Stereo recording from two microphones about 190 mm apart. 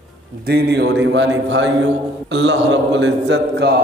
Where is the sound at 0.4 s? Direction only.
60° right (ahead or behind).